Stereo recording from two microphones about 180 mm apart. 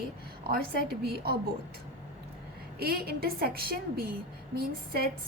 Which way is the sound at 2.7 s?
60° right (ahead or behind).